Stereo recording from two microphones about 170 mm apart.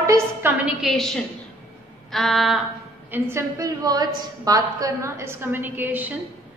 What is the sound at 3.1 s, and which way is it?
A woman's voice, 15° right (ahead or behind).